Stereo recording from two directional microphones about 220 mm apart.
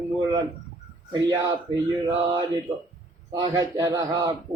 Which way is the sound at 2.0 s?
20° right (ahead or behind).